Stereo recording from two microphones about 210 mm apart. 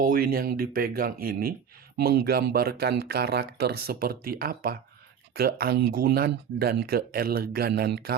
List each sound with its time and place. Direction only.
0.0 s speech: 40° right (ahead or behind)